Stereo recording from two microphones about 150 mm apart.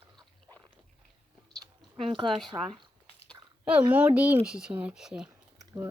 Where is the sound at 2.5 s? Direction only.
20° right (ahead or behind).